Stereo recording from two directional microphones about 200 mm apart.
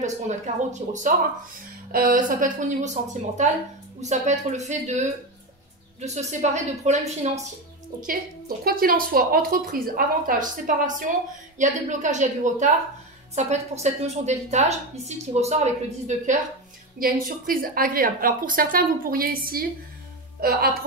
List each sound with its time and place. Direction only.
0.7 s a woman's voice: 35° right (ahead or behind)
8.0 s a woman's voice: 45° right (ahead or behind)
17.0 s a woman's voice: 45° right (ahead or behind)